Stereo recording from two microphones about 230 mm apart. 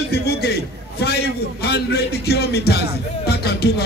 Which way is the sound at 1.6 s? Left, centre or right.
Left.